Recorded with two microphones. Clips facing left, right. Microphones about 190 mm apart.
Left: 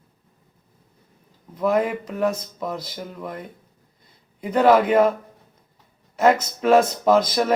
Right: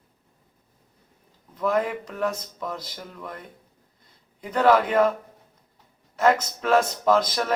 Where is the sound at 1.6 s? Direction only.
10° left (ahead or behind).